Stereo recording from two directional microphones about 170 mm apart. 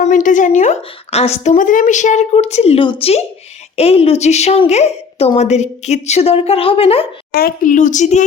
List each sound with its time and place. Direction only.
0.0 s a woman's voice: 50° left (ahead or behind)
7.3 s a woman's voice: 55° left (ahead or behind)